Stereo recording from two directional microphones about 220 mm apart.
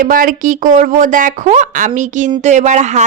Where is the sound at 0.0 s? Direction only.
40° right (ahead or behind).